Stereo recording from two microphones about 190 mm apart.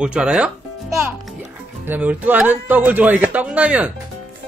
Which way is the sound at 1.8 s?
10° right (ahead or behind).